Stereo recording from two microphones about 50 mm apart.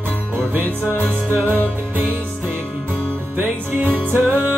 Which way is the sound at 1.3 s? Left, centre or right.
Right.